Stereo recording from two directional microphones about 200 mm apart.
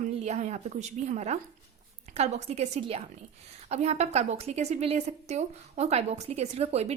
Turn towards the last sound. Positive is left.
turn(degrees=-30)  # may be behind; listen again after turning